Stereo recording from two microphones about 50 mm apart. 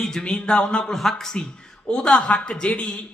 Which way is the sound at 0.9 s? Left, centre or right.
Centre.